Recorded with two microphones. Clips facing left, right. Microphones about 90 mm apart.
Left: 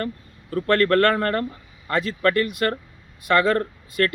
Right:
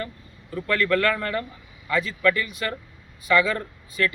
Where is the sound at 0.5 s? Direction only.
55° left (ahead or behind).